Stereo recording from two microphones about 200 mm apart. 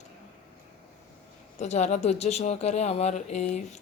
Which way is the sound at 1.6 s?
35° left (ahead or behind).